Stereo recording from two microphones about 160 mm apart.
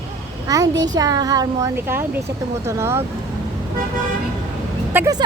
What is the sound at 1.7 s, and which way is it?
Speech, 15° right (ahead or behind).